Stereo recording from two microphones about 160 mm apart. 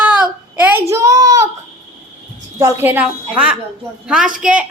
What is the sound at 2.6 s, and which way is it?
A woman's voice, 15° right (ahead or behind).